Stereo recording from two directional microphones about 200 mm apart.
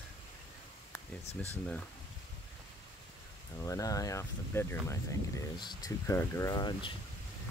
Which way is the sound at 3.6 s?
15° left (ahead or behind).